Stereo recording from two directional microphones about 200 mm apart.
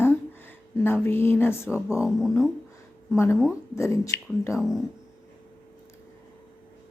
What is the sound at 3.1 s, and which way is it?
A woman's voice, 15° left (ahead or behind).